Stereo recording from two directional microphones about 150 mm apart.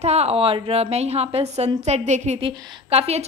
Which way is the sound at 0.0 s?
45° right (ahead or behind).